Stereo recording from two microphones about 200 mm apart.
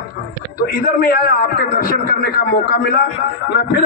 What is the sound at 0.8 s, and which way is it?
A man's voice, 45° left (ahead or behind).